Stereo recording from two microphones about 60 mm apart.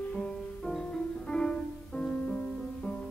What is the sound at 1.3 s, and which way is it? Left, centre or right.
Music, centre.